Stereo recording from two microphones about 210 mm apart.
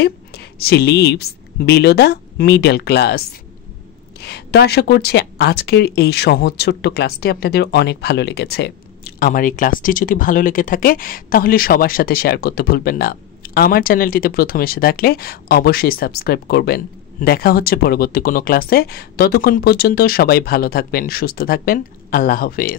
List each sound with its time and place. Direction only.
0.0 s a woman's voice: 50° left (ahead or behind)